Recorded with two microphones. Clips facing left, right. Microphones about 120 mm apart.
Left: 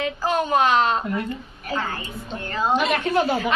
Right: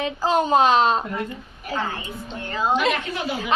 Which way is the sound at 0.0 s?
25° right (ahead or behind).